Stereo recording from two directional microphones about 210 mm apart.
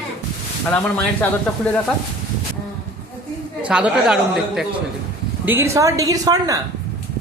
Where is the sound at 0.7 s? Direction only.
5° left (ahead or behind).